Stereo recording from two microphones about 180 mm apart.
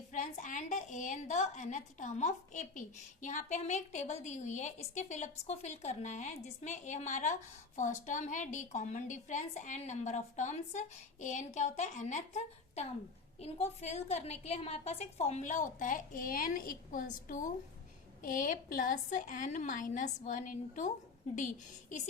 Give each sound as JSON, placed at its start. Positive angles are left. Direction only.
{"t": 0.1, "sound": "a woman's voice", "side_deg": 45}